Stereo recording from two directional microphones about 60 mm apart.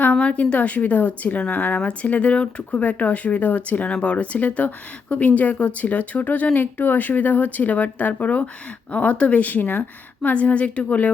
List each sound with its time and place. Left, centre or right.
0.0 s speech: left